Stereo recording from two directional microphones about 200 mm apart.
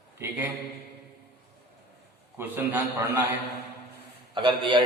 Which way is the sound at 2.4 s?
10° right (ahead or behind).